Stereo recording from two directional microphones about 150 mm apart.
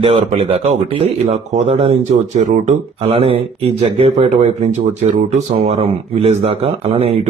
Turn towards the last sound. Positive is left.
turn(degrees=-40)  # may be behind; listen again after turning